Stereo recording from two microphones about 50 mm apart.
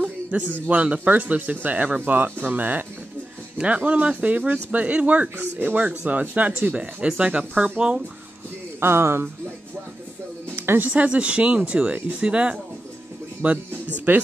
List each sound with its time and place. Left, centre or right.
0.0 s a man's voice: right
3.5 s speech: right
5.4 s speech: right
8.7 s speech: right
10.5 s music: right
10.9 s speech: right